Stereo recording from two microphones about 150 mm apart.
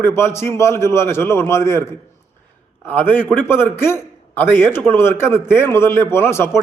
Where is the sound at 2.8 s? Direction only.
10° left (ahead or behind).